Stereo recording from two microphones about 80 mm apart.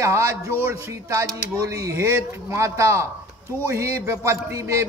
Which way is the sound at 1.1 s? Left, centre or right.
Right.